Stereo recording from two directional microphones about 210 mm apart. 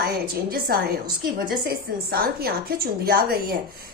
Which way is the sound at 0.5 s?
45° right (ahead or behind).